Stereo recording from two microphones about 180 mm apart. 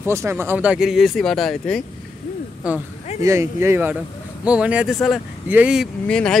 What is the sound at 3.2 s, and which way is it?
Speech, 15° right (ahead or behind).